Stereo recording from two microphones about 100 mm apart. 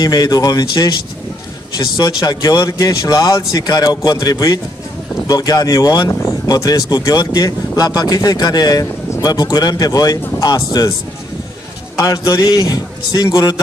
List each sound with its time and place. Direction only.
0.0 s speech: 40° left (ahead or behind)
2.0 s speech: 40° left (ahead or behind)
12.1 s speech: 40° left (ahead or behind)